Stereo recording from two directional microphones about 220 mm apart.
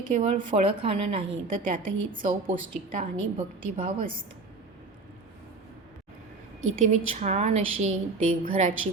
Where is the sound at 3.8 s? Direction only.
40° right (ahead or behind).